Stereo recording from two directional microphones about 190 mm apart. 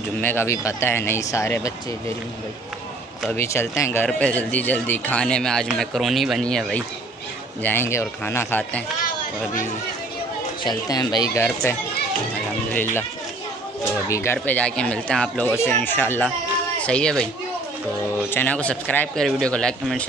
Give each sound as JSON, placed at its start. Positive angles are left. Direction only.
{"t": 0.2, "sound": "speech", "side_deg": 10}
{"t": 3.3, "sound": "speech", "side_deg": 15}
{"t": 10.6, "sound": "speech", "side_deg": 20}
{"t": 12.7, "sound": "speech", "side_deg": 10}
{"t": 14.0, "sound": "speech", "side_deg": 15}
{"t": 18.3, "sound": "speech", "side_deg": 10}